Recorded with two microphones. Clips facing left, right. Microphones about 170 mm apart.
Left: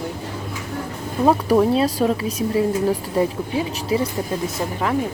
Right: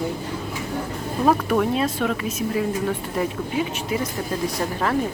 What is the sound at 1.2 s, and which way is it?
Speech, 25° left (ahead or behind).